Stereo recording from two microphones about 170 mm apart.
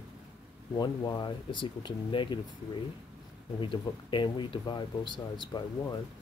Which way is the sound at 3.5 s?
30° left (ahead or behind).